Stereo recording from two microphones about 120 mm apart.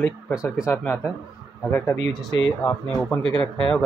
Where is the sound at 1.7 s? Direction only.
20° left (ahead or behind).